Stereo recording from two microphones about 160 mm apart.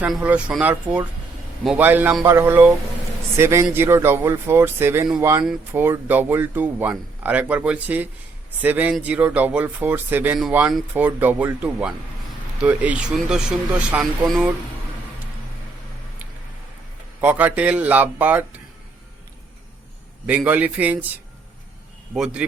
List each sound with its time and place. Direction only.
0.0 s speech: 10° right (ahead or behind)
17.2 s speech: 10° right (ahead or behind)
20.2 s speech: 10° right (ahead or behind)